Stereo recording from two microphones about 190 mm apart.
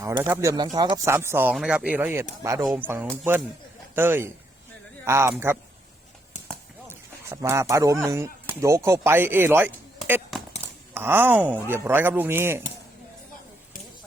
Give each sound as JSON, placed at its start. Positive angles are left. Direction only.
{"t": 0.0, "sound": "speech", "side_deg": -15}
{"t": 6.8, "sound": "speech", "side_deg": -15}
{"t": 10.9, "sound": "speech", "side_deg": -10}